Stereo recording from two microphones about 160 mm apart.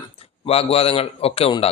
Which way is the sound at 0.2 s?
40° left (ahead or behind).